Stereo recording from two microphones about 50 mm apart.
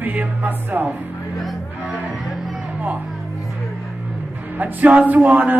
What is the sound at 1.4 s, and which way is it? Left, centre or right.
Music, centre.